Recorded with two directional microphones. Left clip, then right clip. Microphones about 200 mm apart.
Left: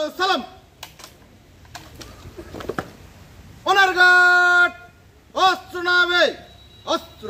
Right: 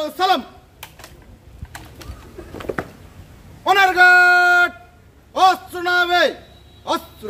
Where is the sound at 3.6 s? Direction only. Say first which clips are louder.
Right 2 dB; 10° right (ahead or behind).